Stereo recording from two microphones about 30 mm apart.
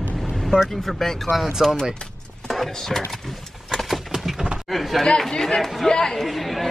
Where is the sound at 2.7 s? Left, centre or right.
Centre.